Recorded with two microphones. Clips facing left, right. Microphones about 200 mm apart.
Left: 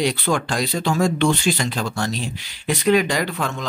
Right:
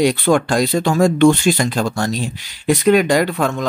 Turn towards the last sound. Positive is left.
turn(degrees=-50)  # may be behind; listen again after turning